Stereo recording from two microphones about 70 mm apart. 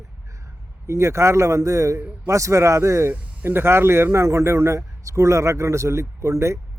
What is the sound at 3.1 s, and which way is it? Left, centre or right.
A man's voice, right.